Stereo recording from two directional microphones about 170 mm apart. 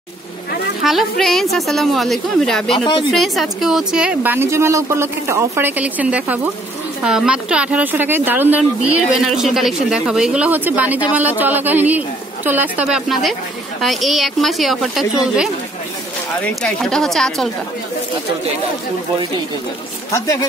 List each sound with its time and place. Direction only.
0.8 s a woman's voice: centre (ahead or behind)
2.8 s speech: 30° left (ahead or behind)
3.1 s a woman's voice: centre (ahead or behind)
16.6 s a woman's voice: centre (ahead or behind)